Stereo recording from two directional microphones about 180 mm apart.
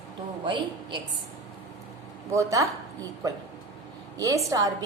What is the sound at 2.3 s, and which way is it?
A woman's voice, 15° right (ahead or behind).